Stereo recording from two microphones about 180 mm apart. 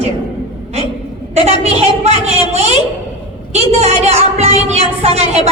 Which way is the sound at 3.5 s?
35° right (ahead or behind).